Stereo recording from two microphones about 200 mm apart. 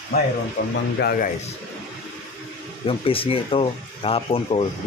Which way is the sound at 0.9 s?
50° left (ahead or behind).